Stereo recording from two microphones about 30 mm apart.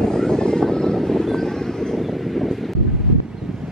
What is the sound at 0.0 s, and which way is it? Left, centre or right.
Vehicle, centre.